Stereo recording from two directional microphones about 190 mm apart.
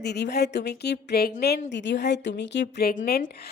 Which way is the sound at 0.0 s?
60° left (ahead or behind).